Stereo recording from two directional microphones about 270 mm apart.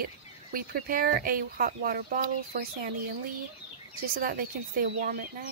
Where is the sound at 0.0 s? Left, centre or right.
Right.